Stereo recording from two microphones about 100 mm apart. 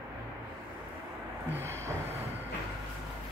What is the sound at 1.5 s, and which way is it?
Music, 25° right (ahead or behind).